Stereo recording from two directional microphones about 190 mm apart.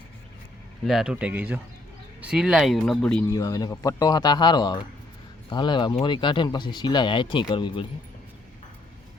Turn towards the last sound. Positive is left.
turn(degrees=25)  # may be behind; listen again after turning